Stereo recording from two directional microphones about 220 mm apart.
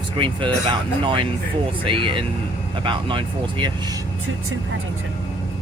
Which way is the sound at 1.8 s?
25° right (ahead or behind).